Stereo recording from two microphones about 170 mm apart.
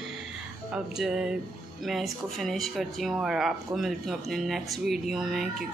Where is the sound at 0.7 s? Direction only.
5° right (ahead or behind).